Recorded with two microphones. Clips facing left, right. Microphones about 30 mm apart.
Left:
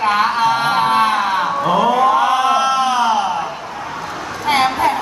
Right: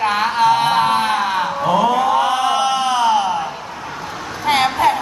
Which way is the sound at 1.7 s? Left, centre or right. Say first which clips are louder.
Left 1 dB; centre.